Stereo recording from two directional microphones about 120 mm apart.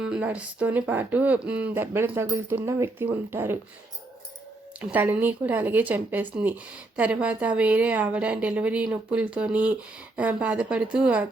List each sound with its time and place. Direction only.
0.0 s a woman's voice: 10° right (ahead or behind)
4.8 s a woman's voice: 10° right (ahead or behind)